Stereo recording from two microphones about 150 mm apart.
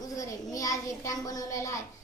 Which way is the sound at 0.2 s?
25° left (ahead or behind).